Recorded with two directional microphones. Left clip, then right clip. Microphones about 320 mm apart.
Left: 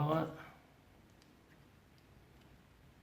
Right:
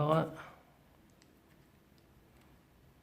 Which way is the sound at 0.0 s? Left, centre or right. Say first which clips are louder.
Right 5 dB; right.